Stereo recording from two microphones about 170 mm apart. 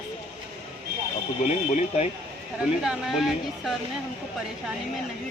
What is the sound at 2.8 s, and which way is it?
Speech, 5° right (ahead or behind).